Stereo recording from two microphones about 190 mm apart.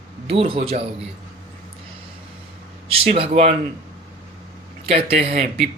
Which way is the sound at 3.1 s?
35° right (ahead or behind).